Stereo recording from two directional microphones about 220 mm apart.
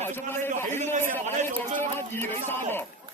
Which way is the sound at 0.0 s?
10° left (ahead or behind).